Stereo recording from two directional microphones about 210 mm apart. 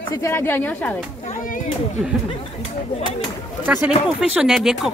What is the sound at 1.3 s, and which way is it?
Speech, 40° left (ahead or behind).